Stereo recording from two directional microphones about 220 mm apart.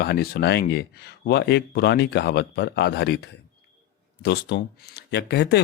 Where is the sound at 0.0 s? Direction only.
45° left (ahead or behind).